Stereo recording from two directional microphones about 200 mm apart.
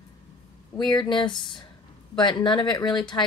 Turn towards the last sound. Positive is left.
turn(degrees=25)  # may be behind; listen again after turning